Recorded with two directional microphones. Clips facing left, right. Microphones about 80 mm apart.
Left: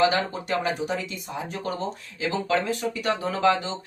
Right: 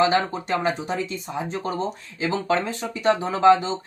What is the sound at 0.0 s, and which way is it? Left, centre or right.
Speech, right.